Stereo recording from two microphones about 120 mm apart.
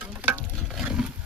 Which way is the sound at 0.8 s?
5° right (ahead or behind).